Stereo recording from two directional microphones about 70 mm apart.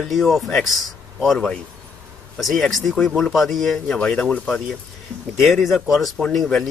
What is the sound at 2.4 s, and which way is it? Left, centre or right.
Speech, centre.